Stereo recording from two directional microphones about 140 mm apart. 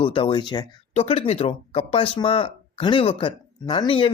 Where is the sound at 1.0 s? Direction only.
45° left (ahead or behind).